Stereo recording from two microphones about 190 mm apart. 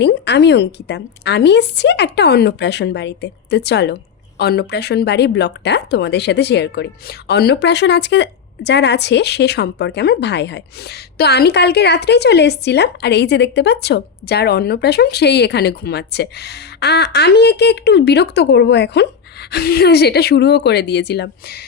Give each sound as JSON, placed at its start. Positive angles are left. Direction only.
{"t": 0.0, "sound": "a woman's voice", "side_deg": 65}